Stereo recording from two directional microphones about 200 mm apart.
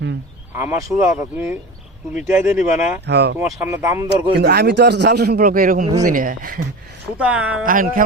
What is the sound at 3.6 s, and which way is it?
Speech, 10° right (ahead or behind).